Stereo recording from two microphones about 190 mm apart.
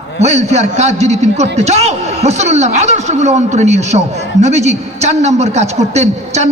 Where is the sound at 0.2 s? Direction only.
35° right (ahead or behind).